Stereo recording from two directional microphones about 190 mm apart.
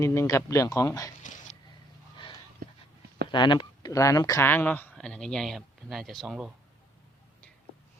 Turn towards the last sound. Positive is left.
turn(degrees=-5)  # may be behind; listen again after turning